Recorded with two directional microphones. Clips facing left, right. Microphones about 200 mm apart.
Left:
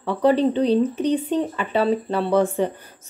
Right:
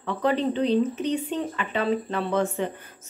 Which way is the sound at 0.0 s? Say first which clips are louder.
Left 6 dB; 35° left (ahead or behind).